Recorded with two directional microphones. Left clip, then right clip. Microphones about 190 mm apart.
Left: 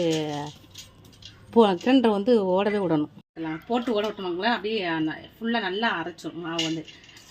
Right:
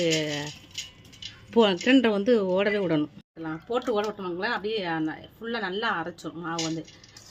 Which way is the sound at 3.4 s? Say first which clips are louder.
Left 1 dB; 30° left (ahead or behind).